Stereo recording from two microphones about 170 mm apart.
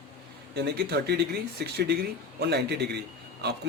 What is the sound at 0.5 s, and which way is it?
Speech, 75° right (ahead or behind).